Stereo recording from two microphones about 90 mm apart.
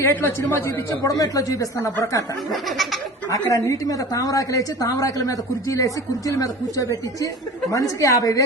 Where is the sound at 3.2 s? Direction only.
35° left (ahead or behind).